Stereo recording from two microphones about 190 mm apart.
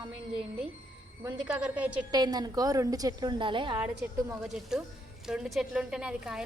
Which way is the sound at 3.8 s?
10° right (ahead or behind).